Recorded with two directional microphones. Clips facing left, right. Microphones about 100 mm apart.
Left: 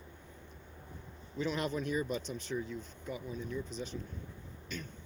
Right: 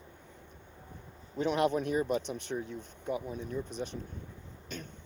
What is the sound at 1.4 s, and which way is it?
Speech, 60° right (ahead or behind).